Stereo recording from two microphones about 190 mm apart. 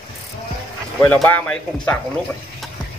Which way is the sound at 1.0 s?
5° left (ahead or behind).